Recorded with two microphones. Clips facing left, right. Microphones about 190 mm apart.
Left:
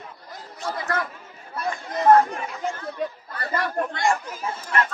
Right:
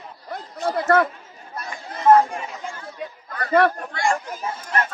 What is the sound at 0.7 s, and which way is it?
Speech, 60° right (ahead or behind).